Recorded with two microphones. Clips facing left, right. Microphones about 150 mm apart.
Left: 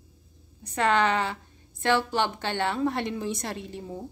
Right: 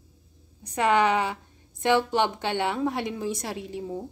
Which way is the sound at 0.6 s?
15° right (ahead or behind).